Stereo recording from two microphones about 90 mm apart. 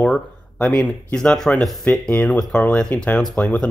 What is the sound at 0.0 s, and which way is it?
Speech, 10° left (ahead or behind).